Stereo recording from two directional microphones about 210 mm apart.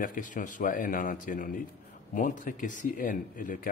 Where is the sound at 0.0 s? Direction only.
40° left (ahead or behind).